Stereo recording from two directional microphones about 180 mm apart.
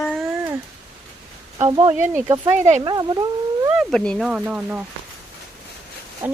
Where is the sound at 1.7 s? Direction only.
35° right (ahead or behind).